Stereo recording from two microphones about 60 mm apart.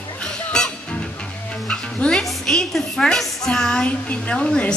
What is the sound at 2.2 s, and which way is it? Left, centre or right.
A woman's voice, centre.